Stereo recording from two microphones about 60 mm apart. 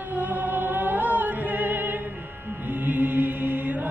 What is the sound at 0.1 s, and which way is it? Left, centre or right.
Music, right.